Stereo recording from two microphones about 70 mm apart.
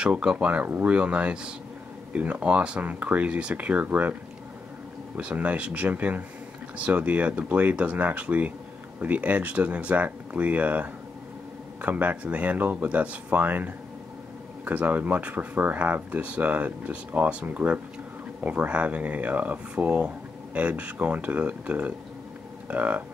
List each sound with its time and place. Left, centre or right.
0.0 s speech: centre